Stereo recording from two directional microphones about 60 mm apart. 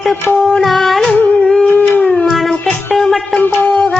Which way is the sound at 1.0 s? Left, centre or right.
Centre.